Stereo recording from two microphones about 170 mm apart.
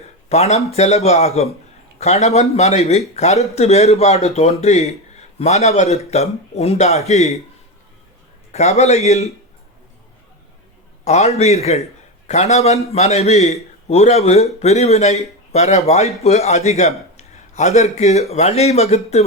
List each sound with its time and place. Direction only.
0.3 s a man's voice: 40° left (ahead or behind)
8.5 s a man's voice: 40° left (ahead or behind)
11.0 s a man's voice: 40° left (ahead or behind)